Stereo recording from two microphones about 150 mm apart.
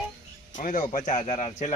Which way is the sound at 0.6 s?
60° left (ahead or behind).